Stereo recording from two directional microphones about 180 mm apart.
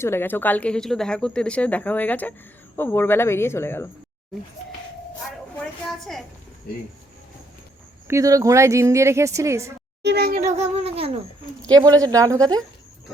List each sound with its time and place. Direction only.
0.0 s speech: 15° left (ahead or behind)
5.8 s a sound: centre (ahead or behind)
8.0 s speech: 15° right (ahead or behind)
10.0 s a child's voice: 65° right (ahead or behind)
10.4 s a sound: 35° right (ahead or behind)
11.6 s speech: 20° right (ahead or behind)